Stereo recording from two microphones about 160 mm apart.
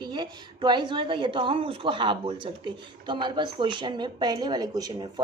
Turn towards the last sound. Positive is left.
turn(degrees=-25)  # may be behind; listen again after turning